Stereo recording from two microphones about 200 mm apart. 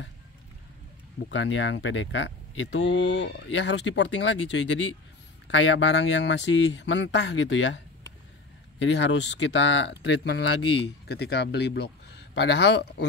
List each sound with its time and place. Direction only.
1.3 s speech: 65° left (ahead or behind)